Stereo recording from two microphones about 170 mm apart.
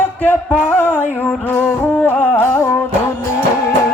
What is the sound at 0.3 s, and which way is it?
Music, 10° left (ahead or behind).